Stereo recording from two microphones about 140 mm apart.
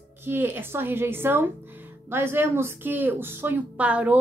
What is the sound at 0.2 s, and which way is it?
A woman's voice, 15° right (ahead or behind).